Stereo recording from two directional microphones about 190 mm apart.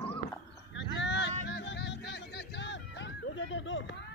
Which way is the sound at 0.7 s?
70° left (ahead or behind).